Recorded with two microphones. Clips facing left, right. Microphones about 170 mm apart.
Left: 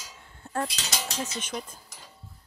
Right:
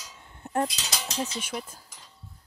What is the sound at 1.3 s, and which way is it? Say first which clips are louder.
Speech: even; 10° right (ahead or behind).